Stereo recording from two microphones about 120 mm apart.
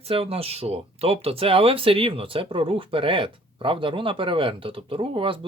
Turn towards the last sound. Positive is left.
turn(degrees=-45)  # may be behind; listen again after turning